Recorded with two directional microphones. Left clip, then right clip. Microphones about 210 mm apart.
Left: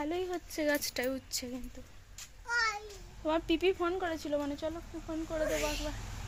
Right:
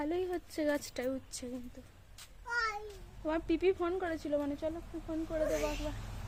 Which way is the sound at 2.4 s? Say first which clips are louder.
Left 3 dB; 15° right (ahead or behind).